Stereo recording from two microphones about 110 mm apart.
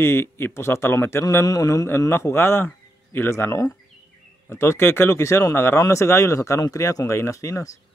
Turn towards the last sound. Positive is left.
turn(degrees=30)  # may be behind; listen again after turning